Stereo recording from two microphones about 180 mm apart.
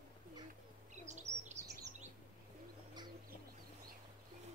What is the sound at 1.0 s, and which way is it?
Bird, 40° right (ahead or behind).